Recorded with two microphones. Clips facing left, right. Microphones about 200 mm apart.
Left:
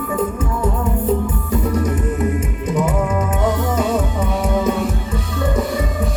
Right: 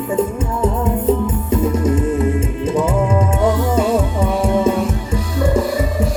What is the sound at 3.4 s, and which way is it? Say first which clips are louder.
Music: right 3 dB; 30° right (ahead or behind).